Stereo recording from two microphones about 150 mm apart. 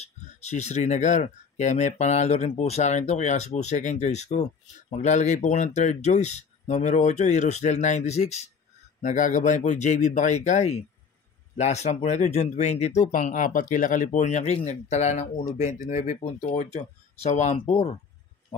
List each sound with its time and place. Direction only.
0.0 s speech: 50° left (ahead or behind)
15.5 s speech: 65° left (ahead or behind); by 17.6 s 50° left (ahead or behind)
17.6 s speech: 40° left (ahead or behind)